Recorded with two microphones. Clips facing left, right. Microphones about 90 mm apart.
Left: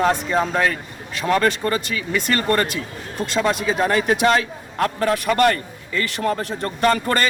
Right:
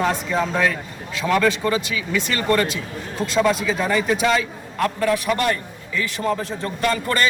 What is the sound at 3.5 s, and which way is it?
A man's voice, 60° left (ahead or behind).